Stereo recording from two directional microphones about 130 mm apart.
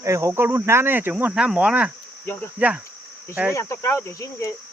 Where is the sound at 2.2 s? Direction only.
15° left (ahead or behind).